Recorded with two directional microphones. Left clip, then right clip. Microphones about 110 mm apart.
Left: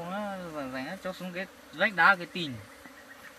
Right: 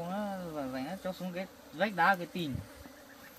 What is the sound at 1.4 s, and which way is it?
Bee, 15° right (ahead or behind).